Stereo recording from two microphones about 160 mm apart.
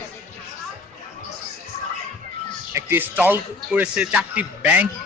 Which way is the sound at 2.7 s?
15° right (ahead or behind).